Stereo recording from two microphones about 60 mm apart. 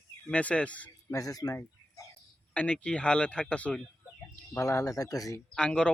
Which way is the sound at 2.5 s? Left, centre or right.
Left.